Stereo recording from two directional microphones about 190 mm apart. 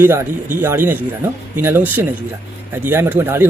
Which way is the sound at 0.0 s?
10° right (ahead or behind).